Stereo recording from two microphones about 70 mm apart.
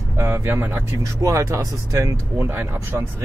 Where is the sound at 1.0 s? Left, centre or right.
Right.